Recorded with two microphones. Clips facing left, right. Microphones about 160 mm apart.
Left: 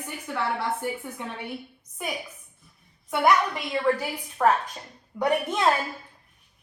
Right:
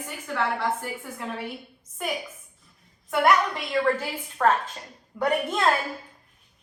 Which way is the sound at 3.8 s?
10° left (ahead or behind).